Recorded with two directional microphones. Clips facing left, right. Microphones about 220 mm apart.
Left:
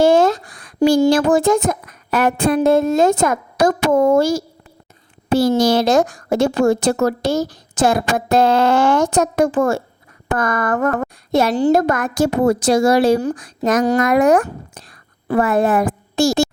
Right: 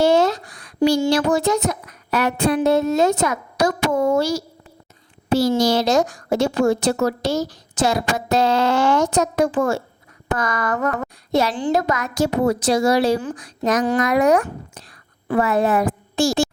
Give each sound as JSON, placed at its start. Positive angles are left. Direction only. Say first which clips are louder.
{"t": 0.0, "sound": "a woman's voice", "louder": "left 3 dB", "side_deg": 50}